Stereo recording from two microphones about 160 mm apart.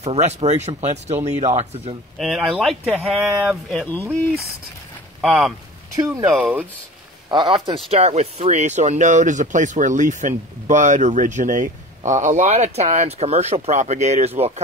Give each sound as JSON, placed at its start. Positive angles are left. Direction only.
{"t": 0.0, "sound": "speech", "side_deg": -40}
{"t": 2.1, "sound": "speech", "side_deg": 0}
{"t": 5.2, "sound": "speech", "side_deg": -5}
{"t": 5.9, "sound": "speech", "side_deg": -20}
{"t": 6.2, "sound": "speech", "side_deg": -5}
{"t": 7.2, "sound": "speech", "side_deg": -30}